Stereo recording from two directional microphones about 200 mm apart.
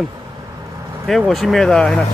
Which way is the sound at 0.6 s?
15° right (ahead or behind).